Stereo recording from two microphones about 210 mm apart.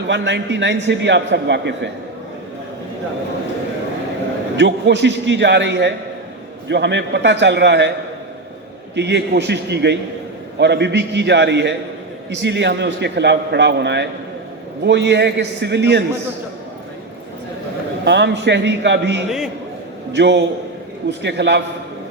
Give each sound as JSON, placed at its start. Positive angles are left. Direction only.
{"t": 0.1, "sound": "a man's voice", "side_deg": -55}
{"t": 4.5, "sound": "a man's voice", "side_deg": -55}
{"t": 9.0, "sound": "a man's voice", "side_deg": -55}
{"t": 18.0, "sound": "a man's voice", "side_deg": -55}